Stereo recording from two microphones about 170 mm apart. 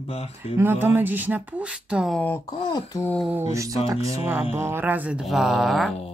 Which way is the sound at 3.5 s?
20° right (ahead or behind).